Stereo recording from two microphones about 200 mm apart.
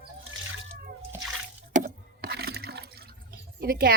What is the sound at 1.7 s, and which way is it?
Water, 45° right (ahead or behind).